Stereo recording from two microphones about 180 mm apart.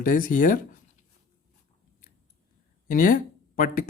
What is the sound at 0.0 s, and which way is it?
Speech, 50° left (ahead or behind).